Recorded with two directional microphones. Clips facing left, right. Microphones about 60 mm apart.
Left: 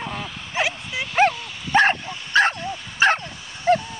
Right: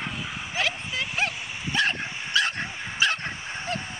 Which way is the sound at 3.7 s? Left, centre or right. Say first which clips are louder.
Left 15 dB; left.